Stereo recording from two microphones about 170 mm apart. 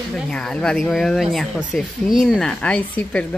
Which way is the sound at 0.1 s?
5° left (ahead or behind).